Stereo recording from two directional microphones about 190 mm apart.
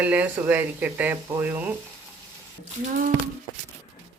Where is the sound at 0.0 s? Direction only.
10° right (ahead or behind).